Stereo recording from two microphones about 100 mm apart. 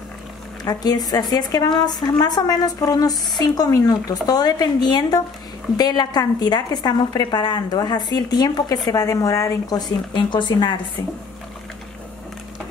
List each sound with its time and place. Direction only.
0.7 s a woman's voice: 40° left (ahead or behind)